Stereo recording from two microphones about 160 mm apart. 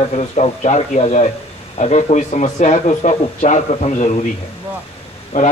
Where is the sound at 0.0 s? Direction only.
40° left (ahead or behind).